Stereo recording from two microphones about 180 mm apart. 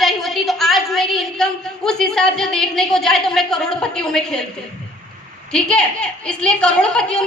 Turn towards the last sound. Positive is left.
turn(degrees=5)  # may be behind; listen again after turning